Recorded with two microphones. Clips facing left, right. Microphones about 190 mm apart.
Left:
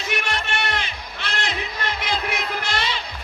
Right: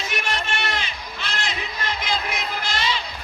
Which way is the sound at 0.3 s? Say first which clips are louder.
Left 1 dB; 60° left (ahead or behind).